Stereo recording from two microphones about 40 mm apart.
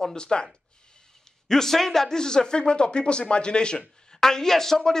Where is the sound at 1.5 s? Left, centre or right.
Centre.